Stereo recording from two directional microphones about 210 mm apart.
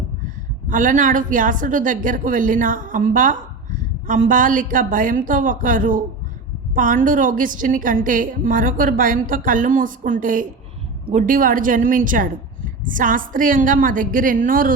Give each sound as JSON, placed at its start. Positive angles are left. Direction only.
{"t": 0.7, "sound": "a woman's voice", "side_deg": -40}